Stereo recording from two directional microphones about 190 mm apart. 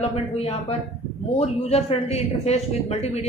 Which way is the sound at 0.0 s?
30° left (ahead or behind).